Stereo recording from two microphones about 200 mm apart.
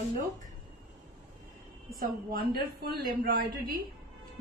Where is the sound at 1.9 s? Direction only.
50° right (ahead or behind).